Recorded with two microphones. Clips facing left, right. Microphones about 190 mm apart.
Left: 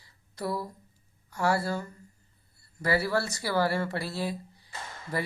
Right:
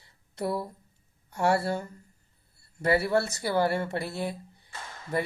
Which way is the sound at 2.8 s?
20° right (ahead or behind).